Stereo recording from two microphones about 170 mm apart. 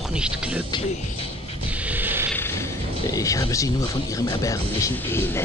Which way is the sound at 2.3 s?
15° left (ahead or behind).